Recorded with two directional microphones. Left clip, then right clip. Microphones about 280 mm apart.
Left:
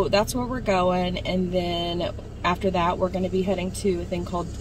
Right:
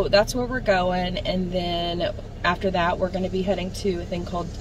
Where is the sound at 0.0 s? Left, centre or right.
Centre.